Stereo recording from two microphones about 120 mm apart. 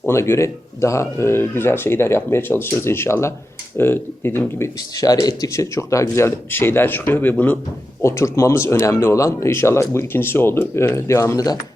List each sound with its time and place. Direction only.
0.1 s speech: 25° left (ahead or behind)